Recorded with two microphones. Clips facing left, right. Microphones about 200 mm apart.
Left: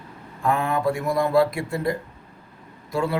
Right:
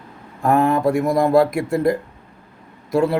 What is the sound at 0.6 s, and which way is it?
Speech, 40° right (ahead or behind).